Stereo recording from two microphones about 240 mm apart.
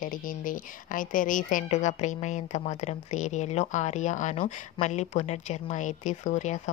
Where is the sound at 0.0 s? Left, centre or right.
Left.